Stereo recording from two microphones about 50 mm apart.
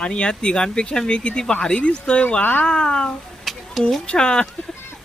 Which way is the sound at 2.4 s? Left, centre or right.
Left.